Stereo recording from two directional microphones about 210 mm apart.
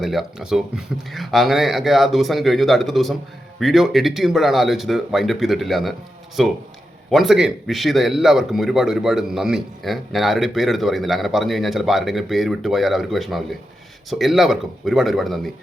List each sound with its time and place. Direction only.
0.0 s a man's voice: centre (ahead or behind)